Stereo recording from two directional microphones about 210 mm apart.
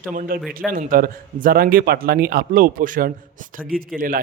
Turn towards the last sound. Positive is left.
turn(degrees=-40)  # may be behind; listen again after turning